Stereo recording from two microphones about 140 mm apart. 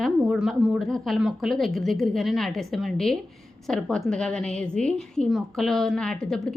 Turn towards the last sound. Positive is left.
turn(degrees=5)  # may be behind; listen again after turning